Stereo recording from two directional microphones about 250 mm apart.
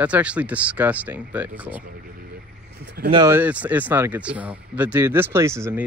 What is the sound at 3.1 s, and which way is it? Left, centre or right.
Speech, centre.